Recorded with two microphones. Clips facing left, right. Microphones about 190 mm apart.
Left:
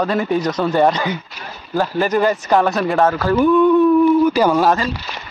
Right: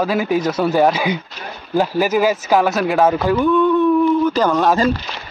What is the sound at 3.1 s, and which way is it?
Speech, 15° right (ahead or behind).